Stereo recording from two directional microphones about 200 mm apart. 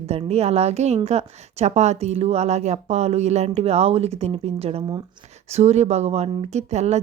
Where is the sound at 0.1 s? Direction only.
30° right (ahead or behind).